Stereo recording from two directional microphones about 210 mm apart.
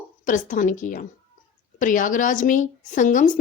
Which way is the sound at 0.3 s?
40° left (ahead or behind).